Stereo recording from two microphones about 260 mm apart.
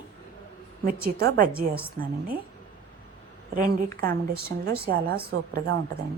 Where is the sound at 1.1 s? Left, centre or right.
Right.